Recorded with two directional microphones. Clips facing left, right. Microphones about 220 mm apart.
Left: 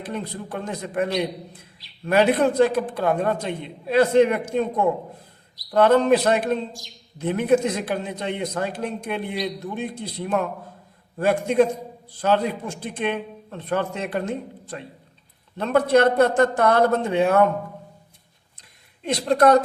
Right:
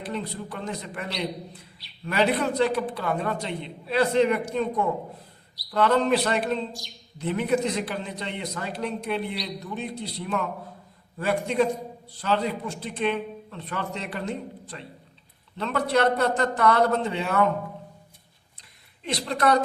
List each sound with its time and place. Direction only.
0.0 s a man's voice: 50° left (ahead or behind)
5.7 s a man's voice: 50° left (ahead or behind)
19.0 s a man's voice: 45° left (ahead or behind)